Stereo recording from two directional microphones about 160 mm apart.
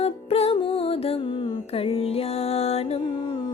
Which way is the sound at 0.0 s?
40° left (ahead or behind).